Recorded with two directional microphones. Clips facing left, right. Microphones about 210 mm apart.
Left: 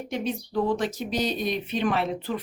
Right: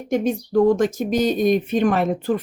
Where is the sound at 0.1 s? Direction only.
45° right (ahead or behind).